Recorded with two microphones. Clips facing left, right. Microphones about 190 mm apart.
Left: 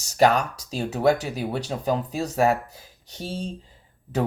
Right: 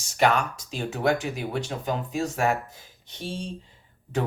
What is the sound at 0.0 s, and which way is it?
Speech, 40° left (ahead or behind).